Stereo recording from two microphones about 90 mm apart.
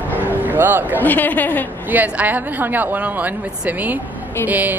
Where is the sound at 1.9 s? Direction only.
20° right (ahead or behind).